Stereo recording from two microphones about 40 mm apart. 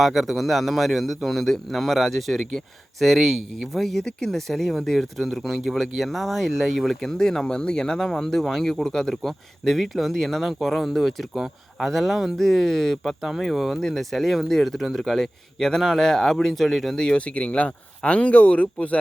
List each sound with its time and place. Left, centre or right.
0.0 s speech: centre
6.9 s speech: centre
9.2 s speech: centre
11.9 s speech: centre
12.4 s speech: centre
13.2 s speech: centre
17.2 s speech: left